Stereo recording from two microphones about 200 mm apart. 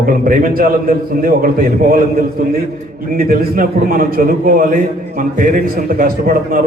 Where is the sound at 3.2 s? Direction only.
45° right (ahead or behind).